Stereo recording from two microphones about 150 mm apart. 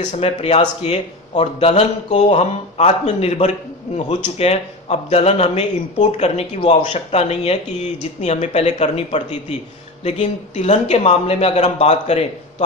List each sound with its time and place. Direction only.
0.0 s speech: 45° left (ahead or behind)